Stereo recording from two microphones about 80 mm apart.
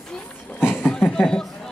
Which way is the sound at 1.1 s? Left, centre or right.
Centre.